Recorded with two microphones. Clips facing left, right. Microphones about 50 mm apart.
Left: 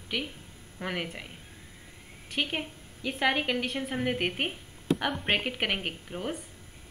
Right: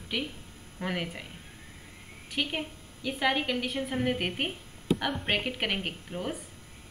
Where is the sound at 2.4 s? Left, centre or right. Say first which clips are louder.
Left 1 dB; centre.